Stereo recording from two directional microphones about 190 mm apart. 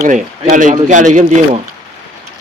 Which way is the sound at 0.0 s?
40° right (ahead or behind).